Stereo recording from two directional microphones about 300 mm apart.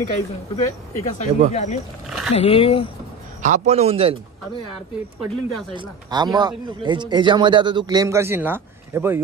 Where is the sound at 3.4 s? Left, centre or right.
Right.